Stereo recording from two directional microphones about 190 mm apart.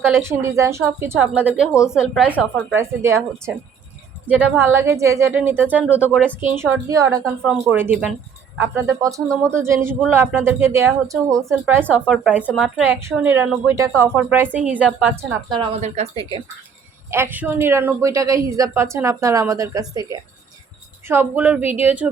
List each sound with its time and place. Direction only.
0.1 s a woman's voice: 15° right (ahead or behind); by 2.7 s 5° left (ahead or behind)
2.7 s a woman's voice: 15° right (ahead or behind)
5.8 s speech: 10° left (ahead or behind)
6.4 s a woman's voice: 10° right (ahead or behind)
15.8 s speech: 35° right (ahead or behind)
17.1 s a woman's voice: 10° right (ahead or behind)